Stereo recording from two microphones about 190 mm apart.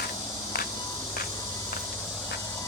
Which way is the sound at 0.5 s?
55° left (ahead or behind).